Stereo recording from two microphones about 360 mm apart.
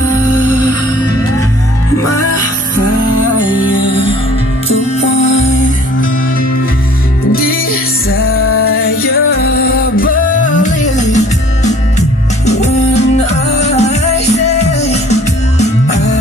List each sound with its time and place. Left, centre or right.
7.3 s music: left
8.1 s music: left
9.0 s music: left